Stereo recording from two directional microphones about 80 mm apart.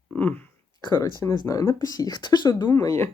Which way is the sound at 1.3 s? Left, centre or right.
Left.